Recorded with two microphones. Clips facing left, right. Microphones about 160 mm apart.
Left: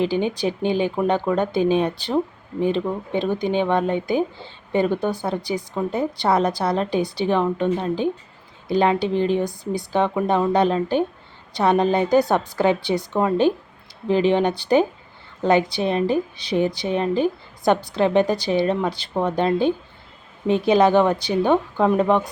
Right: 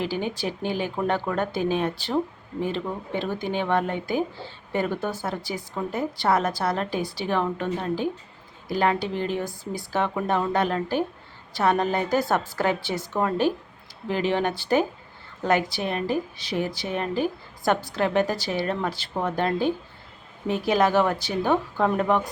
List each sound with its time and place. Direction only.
0.0 s speech: 20° left (ahead or behind)